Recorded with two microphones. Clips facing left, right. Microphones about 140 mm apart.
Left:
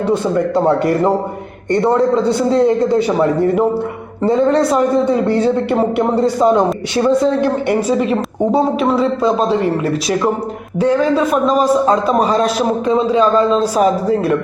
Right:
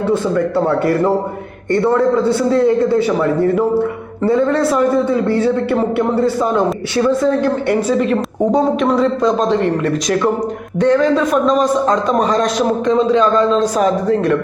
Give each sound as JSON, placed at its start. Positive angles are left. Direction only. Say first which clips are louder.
{"t": 0.1, "sound": "a man's voice", "louder": "left 1 dB", "side_deg": 20}